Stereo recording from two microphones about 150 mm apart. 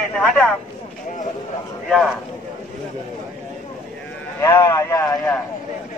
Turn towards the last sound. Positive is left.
turn(degrees=20)  # may be behind; listen again after turning